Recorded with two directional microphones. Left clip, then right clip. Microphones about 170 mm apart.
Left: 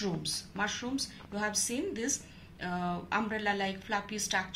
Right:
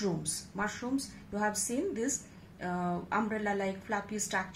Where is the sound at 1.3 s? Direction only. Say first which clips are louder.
Right 1 dB; 40° right (ahead or behind).